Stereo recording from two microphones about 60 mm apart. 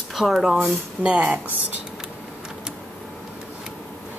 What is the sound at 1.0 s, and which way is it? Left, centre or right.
Speech, right.